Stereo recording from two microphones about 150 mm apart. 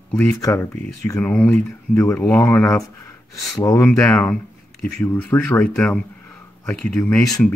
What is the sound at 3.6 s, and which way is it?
Speech, 20° left (ahead or behind).